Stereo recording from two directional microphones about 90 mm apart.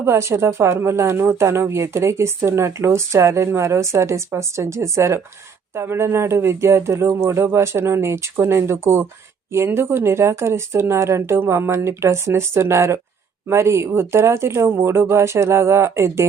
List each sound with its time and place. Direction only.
0.0 s a woman's voice: 30° right (ahead or behind)